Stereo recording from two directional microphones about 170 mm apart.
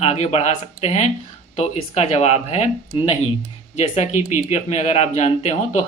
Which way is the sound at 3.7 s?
45° left (ahead or behind).